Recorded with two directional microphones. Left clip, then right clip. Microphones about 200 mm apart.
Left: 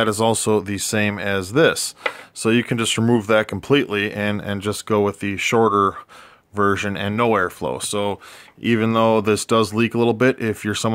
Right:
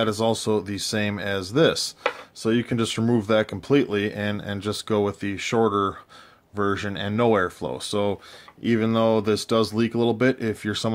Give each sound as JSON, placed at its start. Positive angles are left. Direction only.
{"t": 0.0, "sound": "speech", "side_deg": 30}